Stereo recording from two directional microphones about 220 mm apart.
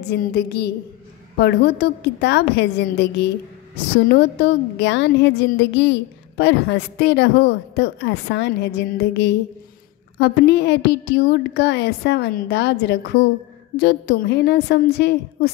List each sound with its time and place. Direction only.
0.1 s a woman's voice: 45° left (ahead or behind)